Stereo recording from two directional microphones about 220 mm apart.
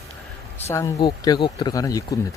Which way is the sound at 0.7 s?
15° left (ahead or behind).